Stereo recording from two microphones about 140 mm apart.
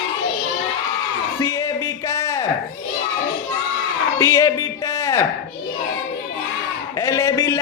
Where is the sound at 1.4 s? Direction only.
25° left (ahead or behind).